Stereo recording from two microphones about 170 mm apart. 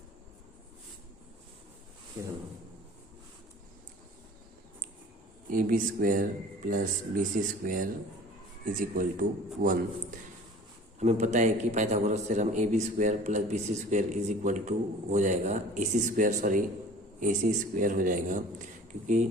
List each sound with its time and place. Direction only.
2.2 s speech: 20° right (ahead or behind)
5.5 s a man's voice: 55° right (ahead or behind)